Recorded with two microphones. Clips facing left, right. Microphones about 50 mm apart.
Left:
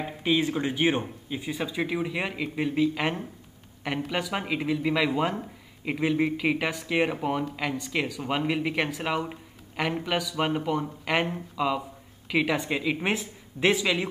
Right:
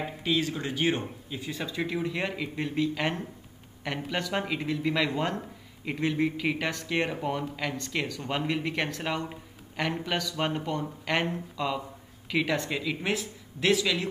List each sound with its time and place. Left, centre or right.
0.2 s speech: centre